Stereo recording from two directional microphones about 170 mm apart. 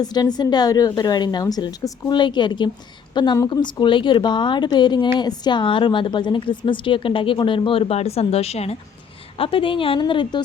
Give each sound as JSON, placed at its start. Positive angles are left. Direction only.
{"t": 0.0, "sound": "a woman's voice", "side_deg": 25}